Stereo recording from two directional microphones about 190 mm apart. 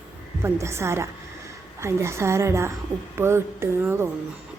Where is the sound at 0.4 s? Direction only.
15° right (ahead or behind).